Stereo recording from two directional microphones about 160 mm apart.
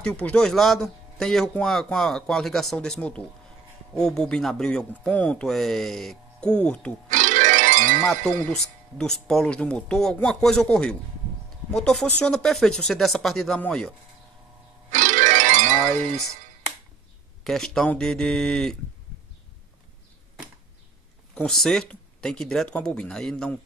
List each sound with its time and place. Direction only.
0.0 s speech: 5° left (ahead or behind)
7.1 s music: 50° right (ahead or behind)
8.0 s speech: 5° left (ahead or behind)
14.9 s music: 50° right (ahead or behind)
17.4 s speech: centre (ahead or behind)
21.4 s speech: centre (ahead or behind)